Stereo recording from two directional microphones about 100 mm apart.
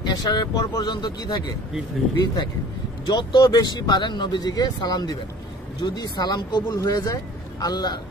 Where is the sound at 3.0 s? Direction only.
50° left (ahead or behind).